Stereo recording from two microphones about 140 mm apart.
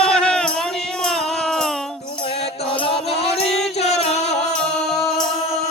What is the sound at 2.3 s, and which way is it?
Music, 40° left (ahead or behind).